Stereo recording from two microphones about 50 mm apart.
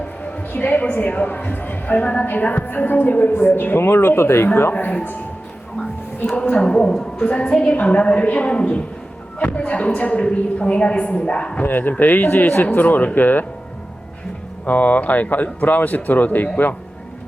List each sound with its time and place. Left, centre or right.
0.3 s a sound: left
0.9 s a woman's voice: left
6.5 s a woman's voice: centre
11.6 s a woman's voice: left
14.6 s a woman's voice: left